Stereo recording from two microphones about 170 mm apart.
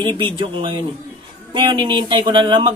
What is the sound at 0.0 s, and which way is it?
Speech, 30° right (ahead or behind).